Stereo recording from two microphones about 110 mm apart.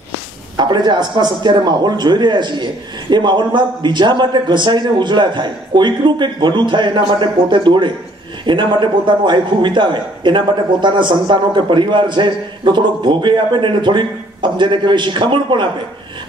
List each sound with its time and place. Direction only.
0.6 s speech: 40° right (ahead or behind)